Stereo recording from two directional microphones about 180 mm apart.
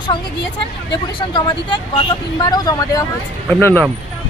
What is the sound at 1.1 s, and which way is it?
Speech, 25° left (ahead or behind).